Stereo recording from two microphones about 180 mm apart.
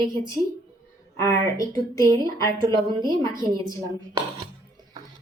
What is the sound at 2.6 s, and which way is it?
Speech, 25° right (ahead or behind).